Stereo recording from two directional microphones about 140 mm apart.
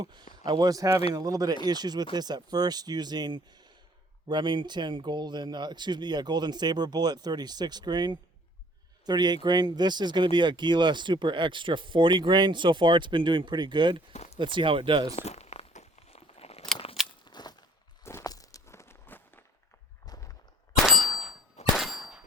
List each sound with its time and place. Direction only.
0.0 s speech: 30° right (ahead or behind)
14.1 s speech: 55° left (ahead or behind)
14.3 s speech: 35° right (ahead or behind)
15.1 s crumpling: 50° left (ahead or behind)
16.7 s keys jangling: 45° left (ahead or behind)
17.2 s a sound: 30° left (ahead or behind); by 19.4 s 15° left (ahead or behind)
20.1 s a sound: 25° left (ahead or behind)
20.8 s clang: centre (ahead or behind)